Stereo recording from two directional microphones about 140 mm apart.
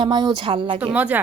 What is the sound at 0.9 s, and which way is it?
Speech, 10° right (ahead or behind).